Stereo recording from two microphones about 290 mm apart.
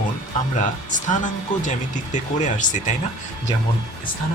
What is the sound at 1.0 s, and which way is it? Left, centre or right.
Speech, left.